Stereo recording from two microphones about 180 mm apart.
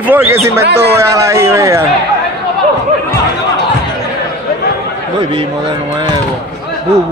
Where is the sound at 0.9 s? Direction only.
15° right (ahead or behind).